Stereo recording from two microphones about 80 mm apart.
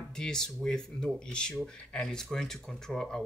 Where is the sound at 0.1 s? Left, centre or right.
Centre.